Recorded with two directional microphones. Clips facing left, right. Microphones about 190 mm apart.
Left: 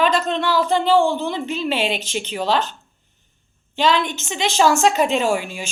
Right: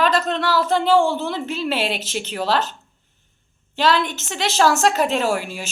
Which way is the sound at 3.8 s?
5° right (ahead or behind).